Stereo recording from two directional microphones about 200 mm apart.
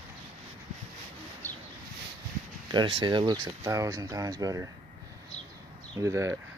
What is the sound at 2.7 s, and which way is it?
Speech, 20° right (ahead or behind).